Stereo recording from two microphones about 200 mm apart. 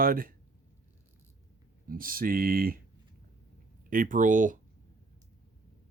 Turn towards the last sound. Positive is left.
turn(degrees=-40)  # may be behind; listen again after turning